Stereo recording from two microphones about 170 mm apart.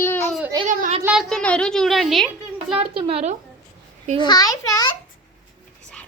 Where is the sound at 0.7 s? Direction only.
50° right (ahead or behind).